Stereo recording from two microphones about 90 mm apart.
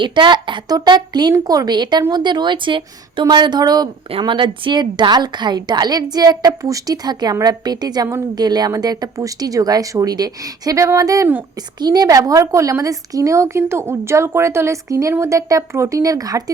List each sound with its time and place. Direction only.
0.0 s a woman's voice: 60° right (ahead or behind)
4.2 s a woman's voice: 60° right (ahead or behind); by 16.4 s 40° right (ahead or behind)